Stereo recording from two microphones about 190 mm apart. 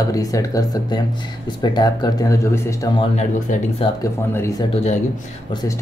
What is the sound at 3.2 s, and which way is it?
Speech, 35° left (ahead or behind).